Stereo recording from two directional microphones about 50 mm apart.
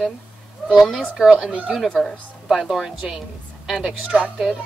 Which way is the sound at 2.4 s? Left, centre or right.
Centre.